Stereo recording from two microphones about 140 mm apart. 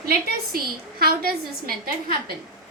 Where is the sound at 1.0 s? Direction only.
90° right.